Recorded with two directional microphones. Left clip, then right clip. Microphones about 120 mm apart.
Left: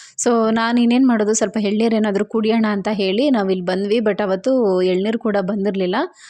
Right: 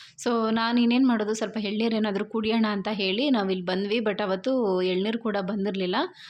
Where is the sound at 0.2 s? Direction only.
75° left (ahead or behind).